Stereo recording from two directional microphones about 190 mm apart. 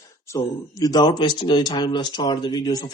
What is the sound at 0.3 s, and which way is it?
Speech, 20° left (ahead or behind).